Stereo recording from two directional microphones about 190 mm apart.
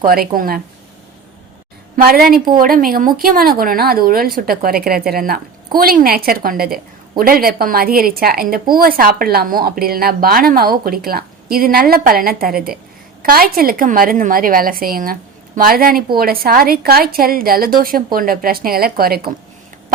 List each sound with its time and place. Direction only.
0.0 s a woman's voice: 50° right (ahead or behind)
2.0 s a woman's voice: 50° right (ahead or behind)